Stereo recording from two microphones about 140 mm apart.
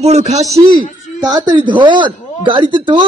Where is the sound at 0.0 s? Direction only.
55° right (ahead or behind).